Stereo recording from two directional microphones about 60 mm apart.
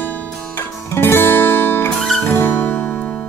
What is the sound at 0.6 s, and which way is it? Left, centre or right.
Music, left.